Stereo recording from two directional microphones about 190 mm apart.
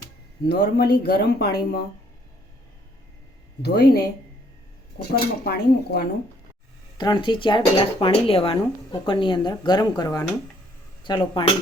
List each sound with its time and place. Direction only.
0.4 s speech: 60° left (ahead or behind)
3.6 s speech: 60° left (ahead or behind)
6.9 s speech: 25° left (ahead or behind)